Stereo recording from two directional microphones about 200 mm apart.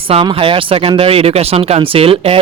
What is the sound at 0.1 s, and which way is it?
Speech, 25° right (ahead or behind).